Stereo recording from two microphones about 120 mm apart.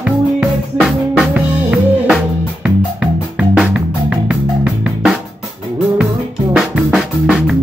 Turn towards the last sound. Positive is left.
turn(degrees=-5)  # may be behind; listen again after turning